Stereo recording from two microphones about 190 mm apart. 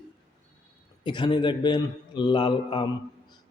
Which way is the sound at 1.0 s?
25° left (ahead or behind).